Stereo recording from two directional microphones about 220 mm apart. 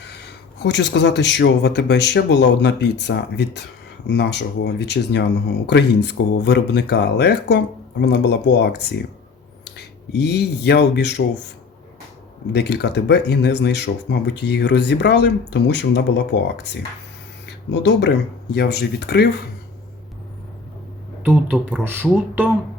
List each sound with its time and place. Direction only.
0.6 s speech: 50° left (ahead or behind)
10.1 s speech: 50° left (ahead or behind)
12.5 s speech: 50° left (ahead or behind)
17.4 s speech: 50° left (ahead or behind)
21.2 s speech: 10° right (ahead or behind)